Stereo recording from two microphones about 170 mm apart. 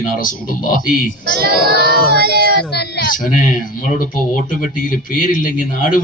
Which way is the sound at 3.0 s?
55° left (ahead or behind).